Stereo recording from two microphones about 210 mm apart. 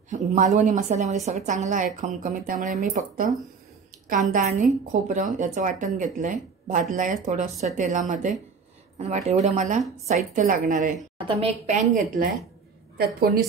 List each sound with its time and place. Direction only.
0.1 s speech: 35° right (ahead or behind)
11.1 s a woman's voice: 25° right (ahead or behind)
12.9 s a woman's voice: 45° right (ahead or behind)